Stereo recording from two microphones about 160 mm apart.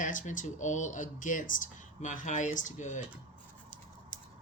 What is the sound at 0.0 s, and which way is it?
Speech, 50° left (ahead or behind).